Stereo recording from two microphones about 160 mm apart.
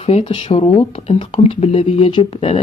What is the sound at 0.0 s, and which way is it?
Speech, 35° left (ahead or behind).